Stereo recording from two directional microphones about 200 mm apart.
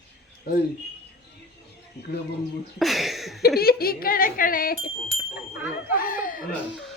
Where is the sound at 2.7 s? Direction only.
Centre (ahead or behind).